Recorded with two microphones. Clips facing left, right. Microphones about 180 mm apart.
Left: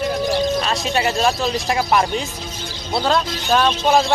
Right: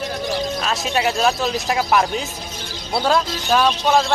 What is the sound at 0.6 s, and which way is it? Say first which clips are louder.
Speech: even; centre (ahead or behind).